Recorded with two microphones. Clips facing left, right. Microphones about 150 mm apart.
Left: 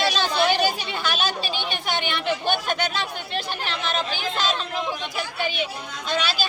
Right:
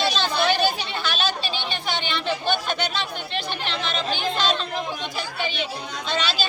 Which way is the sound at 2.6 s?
45° left (ahead or behind).